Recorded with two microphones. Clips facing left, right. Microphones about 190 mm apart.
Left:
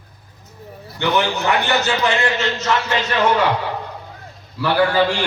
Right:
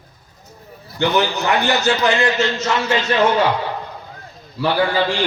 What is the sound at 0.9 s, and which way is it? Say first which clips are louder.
A man's voice: right 1 dB; 35° right (ahead or behind).